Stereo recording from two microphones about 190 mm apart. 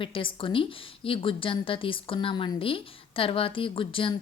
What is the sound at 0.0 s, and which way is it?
A woman's voice, 25° left (ahead or behind).